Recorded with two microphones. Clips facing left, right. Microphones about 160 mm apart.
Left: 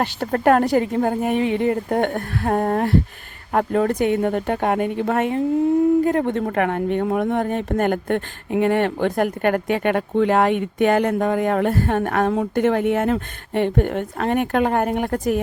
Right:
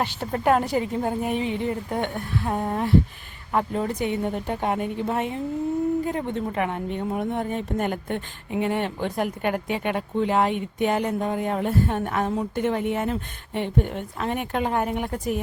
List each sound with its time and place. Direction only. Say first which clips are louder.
0.0 s speech: left 5 dB; 60° left (ahead or behind)
6.1 s speech: left 7 dB; 70° left (ahead or behind)